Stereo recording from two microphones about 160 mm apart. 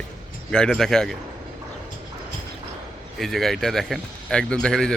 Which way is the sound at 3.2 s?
Centre (ahead or behind).